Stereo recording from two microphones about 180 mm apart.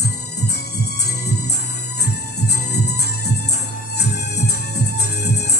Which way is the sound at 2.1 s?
65° left (ahead or behind).